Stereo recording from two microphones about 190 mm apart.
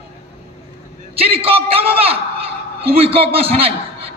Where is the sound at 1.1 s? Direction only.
30° right (ahead or behind).